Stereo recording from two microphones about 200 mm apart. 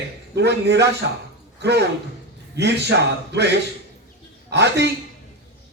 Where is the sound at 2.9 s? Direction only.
60° right (ahead or behind).